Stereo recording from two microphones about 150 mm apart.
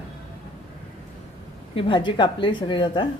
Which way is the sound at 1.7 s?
35° left (ahead or behind).